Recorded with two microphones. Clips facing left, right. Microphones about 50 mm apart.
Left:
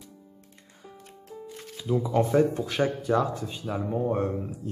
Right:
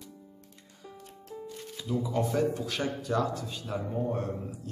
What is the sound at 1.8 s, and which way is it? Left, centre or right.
Speech, left.